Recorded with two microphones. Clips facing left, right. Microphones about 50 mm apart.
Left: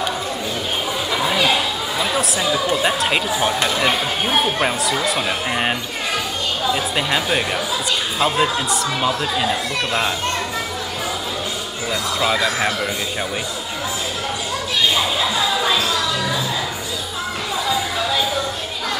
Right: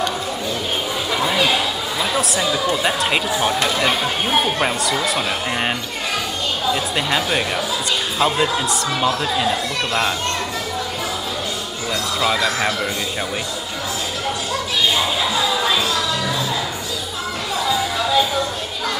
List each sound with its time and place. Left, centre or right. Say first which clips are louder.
1.1 s chatter: even; centre
2.0 s speech: even; centre
11.9 s speech: even; centre
15.6 s music: even; centre